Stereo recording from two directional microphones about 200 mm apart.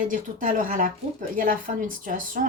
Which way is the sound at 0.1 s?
40° right (ahead or behind).